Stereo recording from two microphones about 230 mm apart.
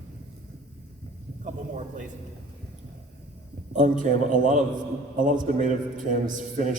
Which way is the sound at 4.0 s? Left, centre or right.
Right.